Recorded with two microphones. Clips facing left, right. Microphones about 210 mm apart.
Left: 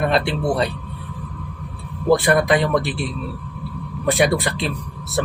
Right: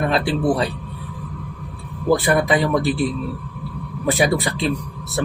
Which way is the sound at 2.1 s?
Centre (ahead or behind).